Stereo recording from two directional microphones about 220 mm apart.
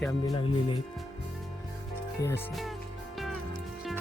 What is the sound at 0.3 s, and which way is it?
Speech, 20° left (ahead or behind).